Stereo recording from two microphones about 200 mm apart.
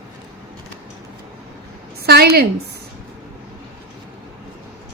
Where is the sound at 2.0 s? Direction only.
55° right (ahead or behind).